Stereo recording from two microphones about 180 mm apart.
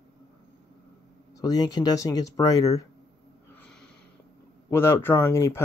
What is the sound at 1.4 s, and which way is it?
Speech, 20° left (ahead or behind).